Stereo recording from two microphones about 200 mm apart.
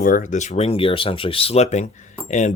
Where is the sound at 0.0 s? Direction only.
40° left (ahead or behind).